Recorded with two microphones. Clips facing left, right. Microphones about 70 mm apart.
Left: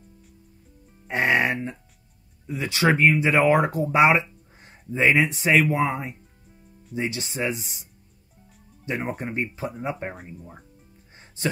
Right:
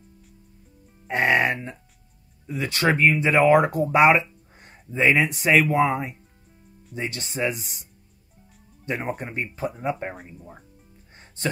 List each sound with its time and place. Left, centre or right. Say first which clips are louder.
1.0 s speech: right 1 dB; centre